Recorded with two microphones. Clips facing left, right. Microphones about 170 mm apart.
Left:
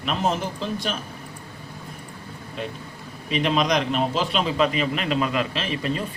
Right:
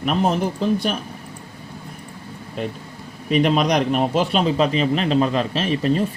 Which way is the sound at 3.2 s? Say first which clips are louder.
Right 4 dB; 50° right (ahead or behind).